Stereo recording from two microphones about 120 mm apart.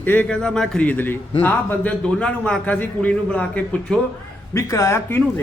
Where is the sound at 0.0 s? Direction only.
15° left (ahead or behind).